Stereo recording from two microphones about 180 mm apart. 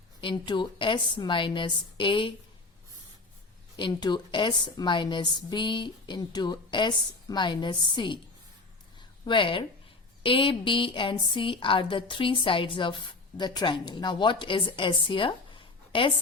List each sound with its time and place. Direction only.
0.2 s a woman's voice: 25° left (ahead or behind)
3.8 s a woman's voice: 25° left (ahead or behind)
9.2 s a woman's voice: 25° left (ahead or behind)